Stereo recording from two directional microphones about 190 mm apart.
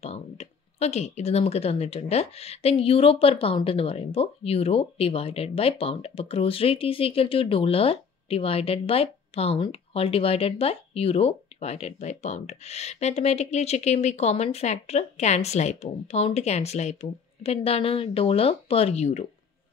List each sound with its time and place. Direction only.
0.0 s speech: 35° left (ahead or behind)